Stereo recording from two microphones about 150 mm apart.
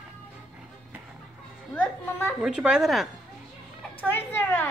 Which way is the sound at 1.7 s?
10° left (ahead or behind).